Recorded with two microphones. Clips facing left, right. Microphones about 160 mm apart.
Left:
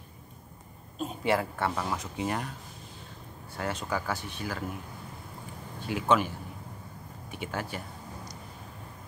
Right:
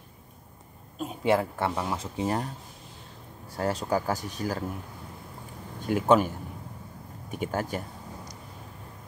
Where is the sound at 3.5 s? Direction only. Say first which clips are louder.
Right 5 dB; 40° right (ahead or behind).